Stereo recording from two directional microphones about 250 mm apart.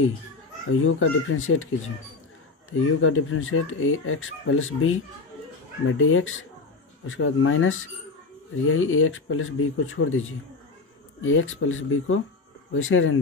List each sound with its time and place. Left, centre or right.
0.7 s speech: left
3.0 s speech: left